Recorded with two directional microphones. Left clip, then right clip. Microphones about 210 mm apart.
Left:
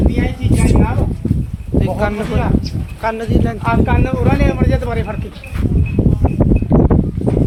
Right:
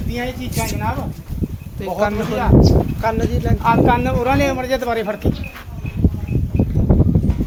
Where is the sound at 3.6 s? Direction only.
45° right (ahead or behind).